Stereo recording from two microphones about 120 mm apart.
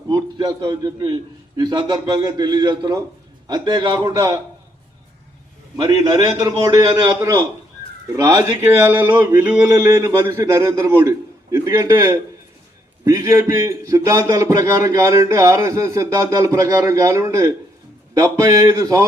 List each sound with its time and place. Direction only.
0.1 s a man's voice: 30° right (ahead or behind)
5.7 s a man's voice: 35° right (ahead or behind)
8.8 s a man's voice: 15° right (ahead or behind)